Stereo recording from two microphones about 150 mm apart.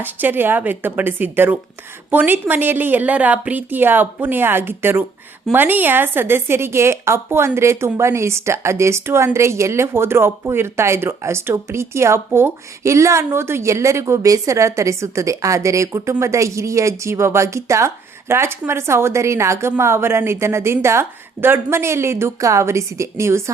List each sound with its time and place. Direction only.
0.0 s a woman's voice: 10° right (ahead or behind)